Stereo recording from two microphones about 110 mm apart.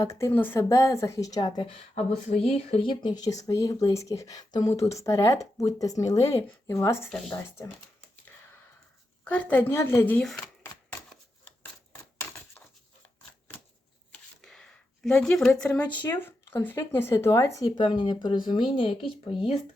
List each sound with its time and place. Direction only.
0.0 s speech: 25° left (ahead or behind)
1.4 s speech: 40° left (ahead or behind)
2.6 s speech: 65° left (ahead or behind); by 7.1 s 25° left (ahead or behind)
7.1 s a woman's voice: 5° left (ahead or behind)
9.2 s a woman's voice: 15° left (ahead or behind)
10.2 s a woman's voice: 5° left (ahead or behind)
14.4 s a sound: 5° left (ahead or behind)
15.2 s a woman's voice: 5° left (ahead or behind); by 19.3 s 55° left (ahead or behind)